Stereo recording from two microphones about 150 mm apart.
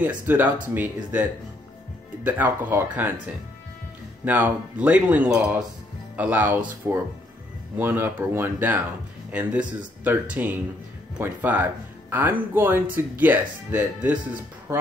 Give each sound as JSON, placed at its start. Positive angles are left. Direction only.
{"t": 0.0, "sound": "speech", "side_deg": -10}
{"t": 2.2, "sound": "speech", "side_deg": -10}
{"t": 4.2, "sound": "speech", "side_deg": -10}